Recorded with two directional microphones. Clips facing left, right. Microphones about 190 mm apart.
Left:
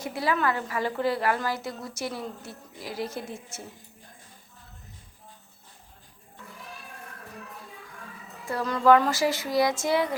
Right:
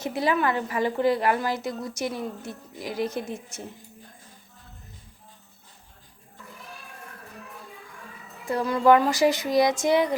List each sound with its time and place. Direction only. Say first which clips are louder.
0.0 s a woman's voice: right 2 dB; 20° right (ahead or behind)
8.4 s a woman's voice: right 1 dB; 15° right (ahead or behind)